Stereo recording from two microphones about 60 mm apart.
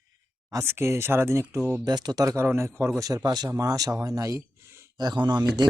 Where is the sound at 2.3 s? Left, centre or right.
Right.